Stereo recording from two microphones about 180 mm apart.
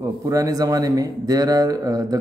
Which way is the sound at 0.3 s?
20° right (ahead or behind).